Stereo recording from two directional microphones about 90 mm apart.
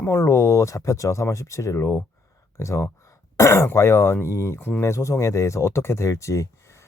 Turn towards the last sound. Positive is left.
turn(degrees=35)  # may be behind; listen again after turning